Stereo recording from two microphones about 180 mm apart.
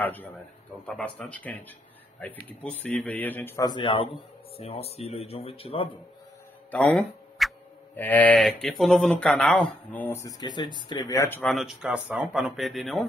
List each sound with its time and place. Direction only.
0.0 s speech: 10° left (ahead or behind); by 5.9 s 30° left (ahead or behind)
6.7 s a sound: 10° left (ahead or behind)
7.9 s speech: 10° left (ahead or behind)
11.5 s speech: 5° right (ahead or behind)